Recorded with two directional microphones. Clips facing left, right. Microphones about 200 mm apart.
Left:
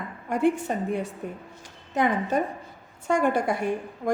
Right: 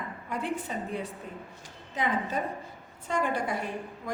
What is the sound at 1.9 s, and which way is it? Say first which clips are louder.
A woman's voice: left 6 dB; 45° left (ahead or behind).